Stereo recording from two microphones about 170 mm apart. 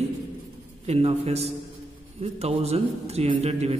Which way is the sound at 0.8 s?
35° right (ahead or behind).